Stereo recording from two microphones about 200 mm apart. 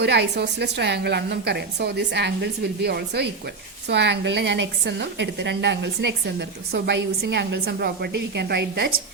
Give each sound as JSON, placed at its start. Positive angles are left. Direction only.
{"t": 0.0, "sound": "a woman's voice", "side_deg": -55}